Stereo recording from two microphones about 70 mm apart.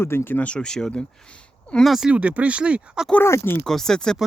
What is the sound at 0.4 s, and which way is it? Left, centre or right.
Speech, centre.